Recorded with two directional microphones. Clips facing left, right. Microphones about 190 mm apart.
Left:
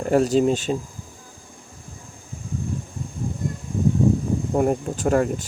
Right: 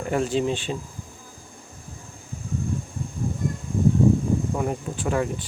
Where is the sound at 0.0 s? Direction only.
40° left (ahead or behind).